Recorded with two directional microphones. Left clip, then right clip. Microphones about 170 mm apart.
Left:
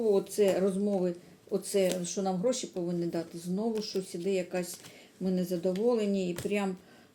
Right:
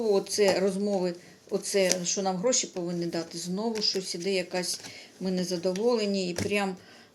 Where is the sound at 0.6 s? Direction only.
25° right (ahead or behind).